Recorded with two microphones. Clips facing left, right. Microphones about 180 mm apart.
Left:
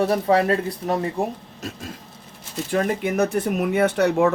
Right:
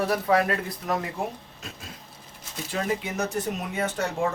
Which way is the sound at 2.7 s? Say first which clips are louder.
Left 7 dB; 55° left (ahead or behind).